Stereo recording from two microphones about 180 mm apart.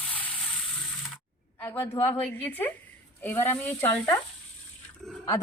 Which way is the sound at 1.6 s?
10° left (ahead or behind).